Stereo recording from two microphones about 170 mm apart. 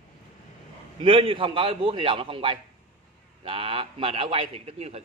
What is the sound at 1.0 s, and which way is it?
Speech, 30° right (ahead or behind).